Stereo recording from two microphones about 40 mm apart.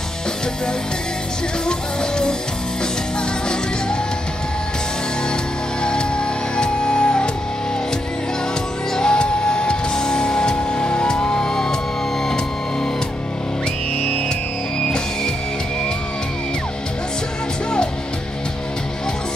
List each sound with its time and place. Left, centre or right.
1.7 s music: centre
5.9 s music: left
8.9 s music: left